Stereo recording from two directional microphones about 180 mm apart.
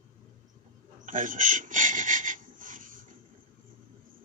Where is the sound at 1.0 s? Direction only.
45° right (ahead or behind).